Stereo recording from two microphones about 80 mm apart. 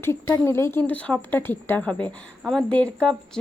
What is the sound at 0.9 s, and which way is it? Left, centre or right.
A woman's voice, centre.